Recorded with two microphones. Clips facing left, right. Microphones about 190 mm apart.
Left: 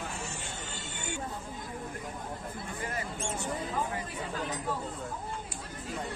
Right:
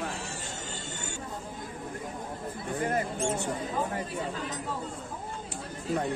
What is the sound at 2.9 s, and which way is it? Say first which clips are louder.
Speech: right 8 dB; 55° right (ahead or behind).